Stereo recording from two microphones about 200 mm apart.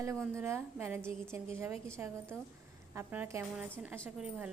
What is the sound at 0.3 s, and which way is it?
A woman's voice, 15° right (ahead or behind).